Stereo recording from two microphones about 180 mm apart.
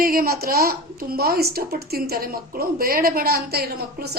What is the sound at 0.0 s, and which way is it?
A woman's voice, 55° right (ahead or behind).